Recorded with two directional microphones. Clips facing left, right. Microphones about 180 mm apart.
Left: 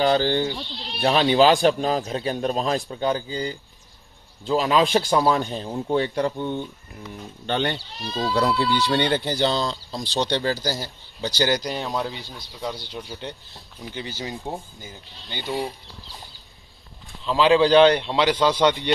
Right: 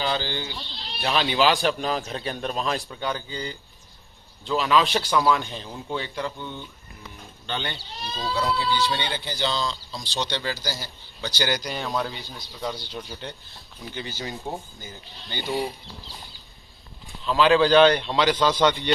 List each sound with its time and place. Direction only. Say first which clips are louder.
0.0 s speech: left 8 dB; 50° left (ahead or behind)
1.0 s a man's voice: left 5 dB; 35° left (ahead or behind)
6.3 s speech: left 9 dB; 55° left (ahead or behind)
8.2 s speech: left 5 dB; 70° left (ahead or behind)
9.0 s speech: left 7 dB; 55° left (ahead or behind)
11.1 s a man's voice: left 4 dB; 35° left (ahead or behind)
11.5 s a man's voice: left 3 dB; 25° left (ahead or behind)
11.9 s a man's voice: left 1 dB; 15° left (ahead or behind)
13.9 s a man's voice: left 1 dB; 25° left (ahead or behind)
17.3 s a man's voice: left 1 dB; 25° left (ahead or behind)
18.3 s a man's voice: left 2 dB; 10° left (ahead or behind)